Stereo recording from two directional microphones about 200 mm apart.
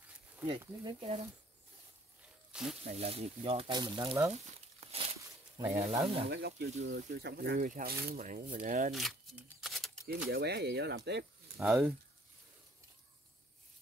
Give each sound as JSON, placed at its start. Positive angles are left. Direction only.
{"t": 0.5, "sound": "speech", "side_deg": -30}
{"t": 2.5, "sound": "speech", "side_deg": -5}
{"t": 2.8, "sound": "speech", "side_deg": -30}
{"t": 4.3, "sound": "crumpling", "side_deg": -35}
{"t": 5.9, "sound": "speech", "side_deg": -25}
{"t": 6.2, "sound": "speech", "side_deg": -55}
{"t": 8.9, "sound": "shuffling cards", "side_deg": 0}
{"t": 10.0, "sound": "speech", "side_deg": -55}
{"t": 11.1, "sound": "a sound", "side_deg": -55}
{"t": 11.6, "sound": "speech", "side_deg": -10}